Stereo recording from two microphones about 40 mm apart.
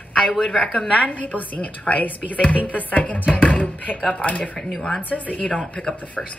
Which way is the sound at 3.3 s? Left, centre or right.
Left.